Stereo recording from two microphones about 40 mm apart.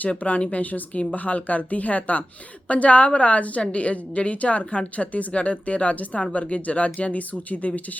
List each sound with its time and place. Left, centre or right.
0.1 s a woman's voice: left